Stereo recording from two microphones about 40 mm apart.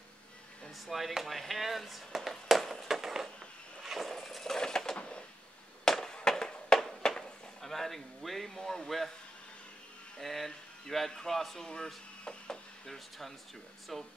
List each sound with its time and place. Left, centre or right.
0.7 s speech: centre
2.6 s a sound: centre
4.1 s a sound: centre
7.6 s speech: centre
10.2 s speech: centre
12.8 s speech: centre